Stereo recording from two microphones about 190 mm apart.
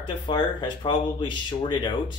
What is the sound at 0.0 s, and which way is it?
Speech, 25° left (ahead or behind).